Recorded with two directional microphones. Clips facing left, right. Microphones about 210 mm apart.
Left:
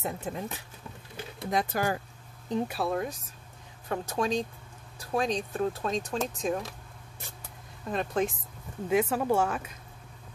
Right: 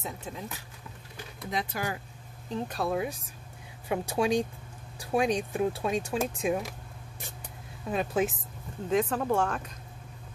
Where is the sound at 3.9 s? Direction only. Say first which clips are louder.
Right 2 dB; 10° right (ahead or behind).